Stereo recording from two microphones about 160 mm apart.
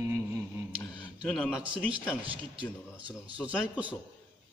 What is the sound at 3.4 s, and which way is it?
Speech, 5° left (ahead or behind).